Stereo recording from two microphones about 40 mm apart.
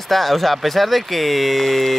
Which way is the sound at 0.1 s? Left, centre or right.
Centre.